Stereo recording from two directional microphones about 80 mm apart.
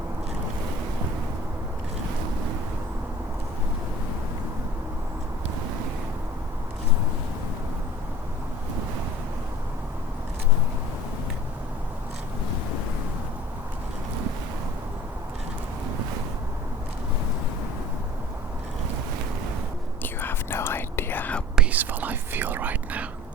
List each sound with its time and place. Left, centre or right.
20.0 s whispering: left
21.5 s whispering: centre